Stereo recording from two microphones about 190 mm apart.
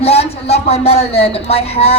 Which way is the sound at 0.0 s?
30° left (ahead or behind).